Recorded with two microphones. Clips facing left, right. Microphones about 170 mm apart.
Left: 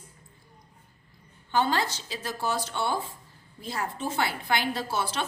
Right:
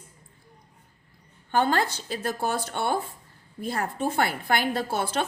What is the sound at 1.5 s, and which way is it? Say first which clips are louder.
A woman's voice: right 2 dB; 50° right (ahead or behind).